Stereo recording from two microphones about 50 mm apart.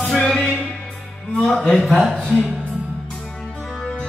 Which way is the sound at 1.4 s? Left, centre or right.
Centre.